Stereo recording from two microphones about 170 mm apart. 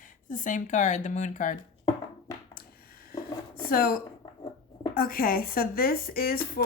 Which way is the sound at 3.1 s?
60° left (ahead or behind).